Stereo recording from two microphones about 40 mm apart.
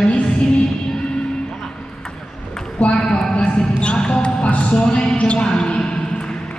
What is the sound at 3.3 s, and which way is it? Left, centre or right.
Basketball bounce, left.